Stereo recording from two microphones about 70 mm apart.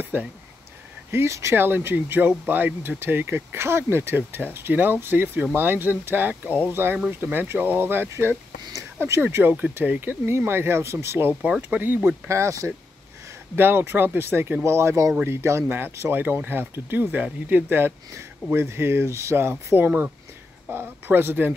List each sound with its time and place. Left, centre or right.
0.1 s speech: right
1.1 s speech: right
11.4 s speech: centre
12.3 s speech: right
13.6 s speech: right